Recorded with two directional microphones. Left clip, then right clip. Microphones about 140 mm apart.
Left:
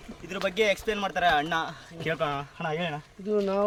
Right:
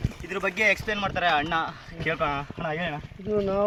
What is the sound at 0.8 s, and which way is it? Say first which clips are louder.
Speech: even; 35° left (ahead or behind).